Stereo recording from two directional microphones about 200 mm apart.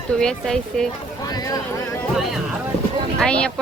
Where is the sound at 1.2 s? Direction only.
20° left (ahead or behind).